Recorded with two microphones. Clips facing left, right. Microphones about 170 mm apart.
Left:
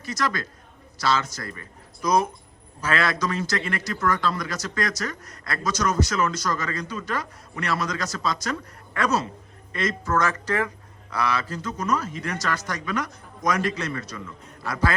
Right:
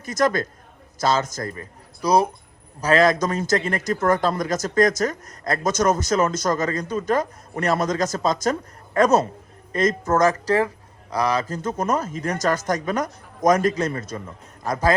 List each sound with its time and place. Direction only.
0.0 s a man's voice: 50° right (ahead or behind)